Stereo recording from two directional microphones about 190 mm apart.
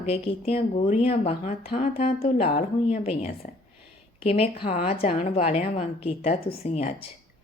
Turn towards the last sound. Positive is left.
turn(degrees=35)  # may be behind; listen again after turning